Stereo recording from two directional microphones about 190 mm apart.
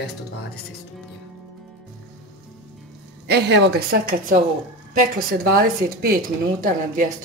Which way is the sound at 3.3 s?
60° right (ahead or behind).